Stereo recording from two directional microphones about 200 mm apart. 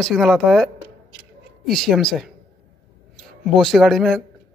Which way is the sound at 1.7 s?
Centre (ahead or behind).